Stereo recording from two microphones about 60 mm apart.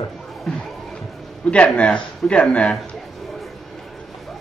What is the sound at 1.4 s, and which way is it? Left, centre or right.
Speech, centre.